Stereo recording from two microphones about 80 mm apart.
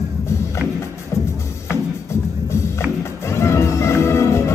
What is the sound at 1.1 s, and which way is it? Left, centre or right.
Music, left.